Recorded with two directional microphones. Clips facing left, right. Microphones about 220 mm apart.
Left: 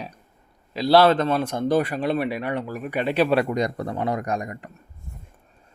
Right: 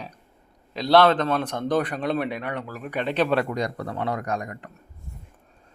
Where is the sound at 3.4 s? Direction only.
20° left (ahead or behind).